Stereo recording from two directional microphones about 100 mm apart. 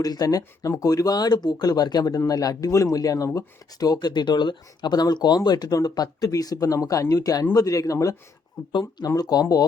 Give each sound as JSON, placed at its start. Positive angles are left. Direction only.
{"t": 0.0, "sound": "speech", "side_deg": 40}